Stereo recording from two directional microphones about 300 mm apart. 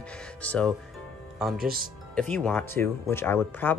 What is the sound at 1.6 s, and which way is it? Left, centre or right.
Speech, right.